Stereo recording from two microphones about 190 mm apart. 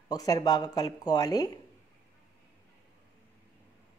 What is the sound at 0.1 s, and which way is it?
Speech, 20° left (ahead or behind).